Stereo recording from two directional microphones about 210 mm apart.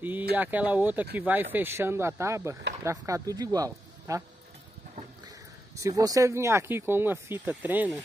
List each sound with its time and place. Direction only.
0.0 s speech: 10° right (ahead or behind)
5.8 s speech: 15° right (ahead or behind)